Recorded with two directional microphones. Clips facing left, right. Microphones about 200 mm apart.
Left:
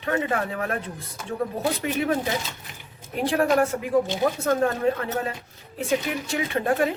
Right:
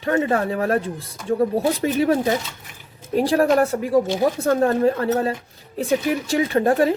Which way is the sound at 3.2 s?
35° right (ahead or behind).